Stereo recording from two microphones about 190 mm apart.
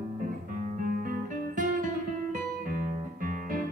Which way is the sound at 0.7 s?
45° right (ahead or behind).